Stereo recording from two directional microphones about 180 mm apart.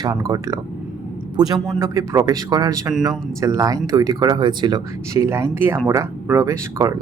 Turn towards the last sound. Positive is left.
turn(degrees=-20)  # may be behind; listen again after turning